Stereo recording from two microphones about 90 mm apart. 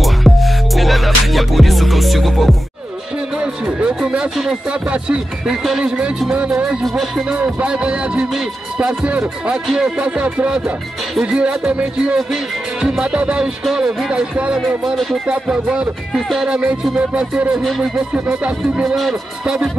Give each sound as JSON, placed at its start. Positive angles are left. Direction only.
{"t": 0.0, "sound": "music", "side_deg": 0}
{"t": 3.3, "sound": "music", "side_deg": -10}
{"t": 7.0, "sound": "speech", "side_deg": 0}
{"t": 7.3, "sound": "music", "side_deg": -20}
{"t": 16.1, "sound": "speech", "side_deg": 0}
{"t": 16.8, "sound": "music", "side_deg": -10}
{"t": 18.9, "sound": "speech", "side_deg": -5}